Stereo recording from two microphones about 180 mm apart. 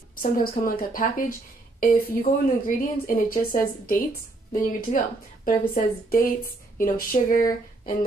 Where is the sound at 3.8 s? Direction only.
50° left (ahead or behind).